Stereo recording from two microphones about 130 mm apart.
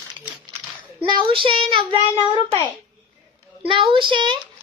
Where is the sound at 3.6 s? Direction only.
45° right (ahead or behind).